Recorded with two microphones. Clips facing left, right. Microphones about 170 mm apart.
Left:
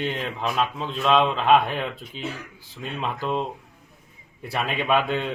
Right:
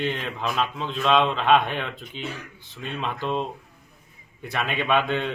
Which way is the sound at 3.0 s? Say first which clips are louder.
Left 1 dB; 5° left (ahead or behind).